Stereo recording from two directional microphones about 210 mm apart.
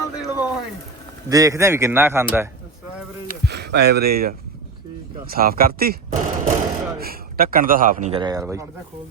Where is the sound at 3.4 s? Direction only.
50° right (ahead or behind).